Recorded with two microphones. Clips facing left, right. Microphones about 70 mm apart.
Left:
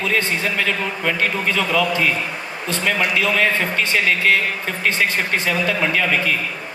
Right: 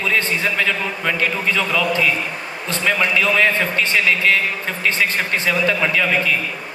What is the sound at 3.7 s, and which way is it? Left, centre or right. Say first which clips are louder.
Speech: right 1 dB; left.